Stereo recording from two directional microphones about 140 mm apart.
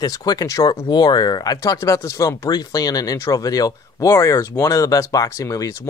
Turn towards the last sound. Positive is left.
turn(degrees=20)  # may be behind; listen again after turning